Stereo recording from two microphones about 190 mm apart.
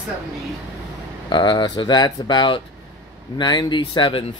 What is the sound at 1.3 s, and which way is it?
Speech, 20° left (ahead or behind).